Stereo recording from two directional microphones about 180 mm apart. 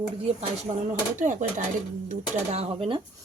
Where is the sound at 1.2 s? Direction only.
45° right (ahead or behind).